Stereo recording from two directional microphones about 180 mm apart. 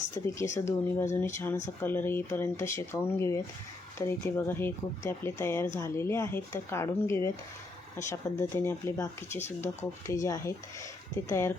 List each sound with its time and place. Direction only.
0.5 s speech: 15° left (ahead or behind)